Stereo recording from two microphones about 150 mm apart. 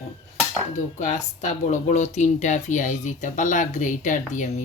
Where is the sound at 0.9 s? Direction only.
55° left (ahead or behind).